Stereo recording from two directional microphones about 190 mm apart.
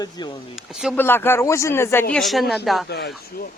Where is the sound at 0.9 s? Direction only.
10° left (ahead or behind).